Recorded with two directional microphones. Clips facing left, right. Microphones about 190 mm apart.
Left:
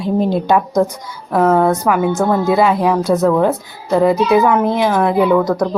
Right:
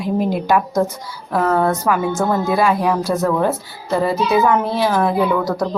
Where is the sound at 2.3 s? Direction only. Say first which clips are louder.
Left 3 dB; 20° left (ahead or behind).